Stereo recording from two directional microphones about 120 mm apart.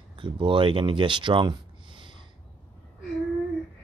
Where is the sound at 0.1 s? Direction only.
45° right (ahead or behind).